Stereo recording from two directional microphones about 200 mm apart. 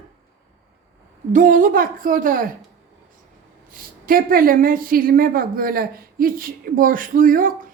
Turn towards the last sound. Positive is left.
turn(degrees=-45)  # may be behind; listen again after turning